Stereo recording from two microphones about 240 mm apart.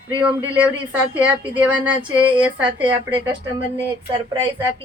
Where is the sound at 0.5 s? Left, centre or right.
Centre.